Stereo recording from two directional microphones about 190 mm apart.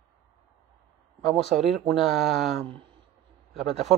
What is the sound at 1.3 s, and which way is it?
Speech, centre (ahead or behind).